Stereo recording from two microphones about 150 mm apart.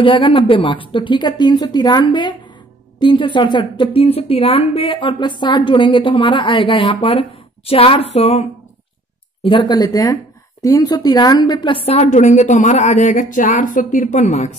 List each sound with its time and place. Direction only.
0.0 s a woman's voice: 35° left (ahead or behind)
9.5 s a woman's voice: 30° left (ahead or behind); by 14.5 s 50° left (ahead or behind)